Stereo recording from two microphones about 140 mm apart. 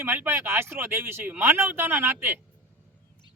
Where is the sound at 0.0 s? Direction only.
15° right (ahead or behind).